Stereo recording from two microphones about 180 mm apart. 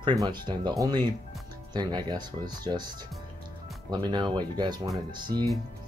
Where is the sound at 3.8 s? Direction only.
20° right (ahead or behind).